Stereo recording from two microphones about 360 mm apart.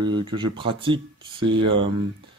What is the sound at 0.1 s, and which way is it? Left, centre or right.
Speech, centre.